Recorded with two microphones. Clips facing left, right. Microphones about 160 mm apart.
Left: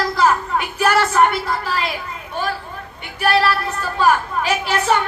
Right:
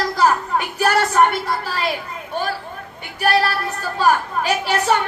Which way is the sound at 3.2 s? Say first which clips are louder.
Left 1 dB; 35° right (ahead or behind).